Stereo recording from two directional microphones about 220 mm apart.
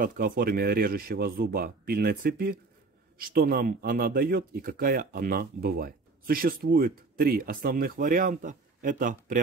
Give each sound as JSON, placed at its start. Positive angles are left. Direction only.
{"t": 0.0, "sound": "a man's voice", "side_deg": -40}